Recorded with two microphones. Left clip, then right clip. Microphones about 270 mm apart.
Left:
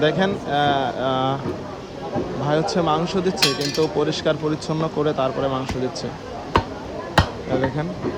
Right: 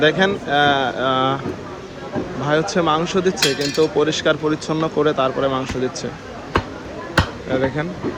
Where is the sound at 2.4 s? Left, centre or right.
Centre.